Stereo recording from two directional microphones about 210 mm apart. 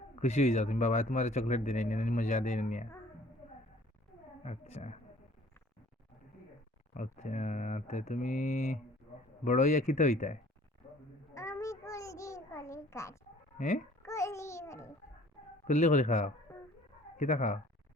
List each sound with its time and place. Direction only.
0.2 s speech: 35° left (ahead or behind)
4.4 s speech: 35° left (ahead or behind)
6.9 s speech: 35° left (ahead or behind)
9.1 s a sound: 35° left (ahead or behind)
9.4 s speech: 35° left (ahead or behind)
11.3 s babbling: 15° left (ahead or behind)
13.6 s speech: 40° left (ahead or behind)
14.0 s babbling: 15° left (ahead or behind)
15.6 s speech: 35° left (ahead or behind)